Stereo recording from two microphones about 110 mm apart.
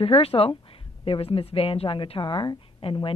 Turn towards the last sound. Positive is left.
turn(degrees=55)  # may be behind; listen again after turning